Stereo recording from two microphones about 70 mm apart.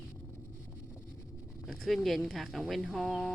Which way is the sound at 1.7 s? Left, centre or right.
Centre.